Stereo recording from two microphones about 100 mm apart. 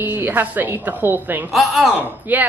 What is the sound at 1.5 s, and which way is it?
Speech, centre (ahead or behind).